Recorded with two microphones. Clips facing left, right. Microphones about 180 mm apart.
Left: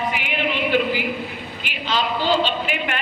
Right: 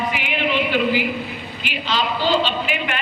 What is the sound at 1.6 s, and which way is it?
A man's voice, 50° left (ahead or behind).